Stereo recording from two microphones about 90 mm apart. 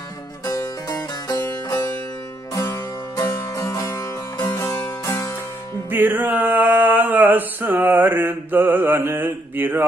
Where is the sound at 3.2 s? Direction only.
40° left (ahead or behind).